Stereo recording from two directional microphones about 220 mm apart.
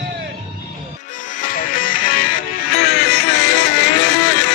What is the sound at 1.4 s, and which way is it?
Music, 40° left (ahead or behind).